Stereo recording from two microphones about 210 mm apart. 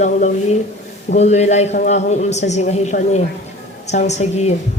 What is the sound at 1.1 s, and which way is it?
Speech, 30° left (ahead or behind).